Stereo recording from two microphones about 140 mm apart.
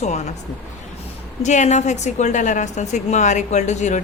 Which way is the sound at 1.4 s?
55° left (ahead or behind).